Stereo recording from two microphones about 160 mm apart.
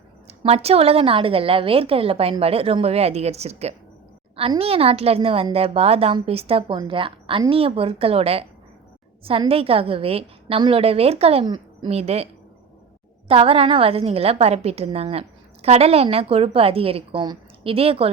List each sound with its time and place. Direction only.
0.3 s a woman's voice: 40° right (ahead or behind)
11.9 s a woman's voice: 40° right (ahead or behind)